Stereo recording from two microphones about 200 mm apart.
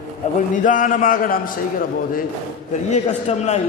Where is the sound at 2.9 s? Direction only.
35° left (ahead or behind).